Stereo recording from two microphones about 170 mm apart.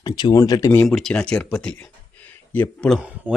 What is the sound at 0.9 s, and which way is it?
Speech, 5° left (ahead or behind).